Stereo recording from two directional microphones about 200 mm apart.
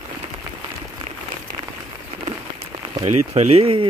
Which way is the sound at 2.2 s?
30° right (ahead or behind).